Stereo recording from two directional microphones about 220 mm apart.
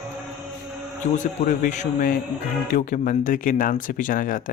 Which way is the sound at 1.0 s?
35° left (ahead or behind).